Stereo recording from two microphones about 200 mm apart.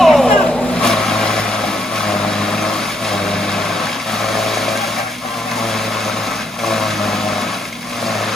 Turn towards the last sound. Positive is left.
turn(degrees=0)  # may be behind; listen again after turning